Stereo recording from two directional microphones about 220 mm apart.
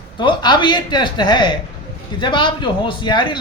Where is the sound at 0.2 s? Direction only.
20° left (ahead or behind).